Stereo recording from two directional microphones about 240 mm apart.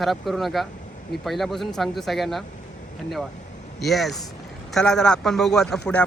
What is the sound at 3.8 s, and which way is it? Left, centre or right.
Speech, centre.